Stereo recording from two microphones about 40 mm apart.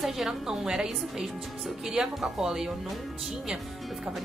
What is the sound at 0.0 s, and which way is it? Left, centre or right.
A woman's voice, centre.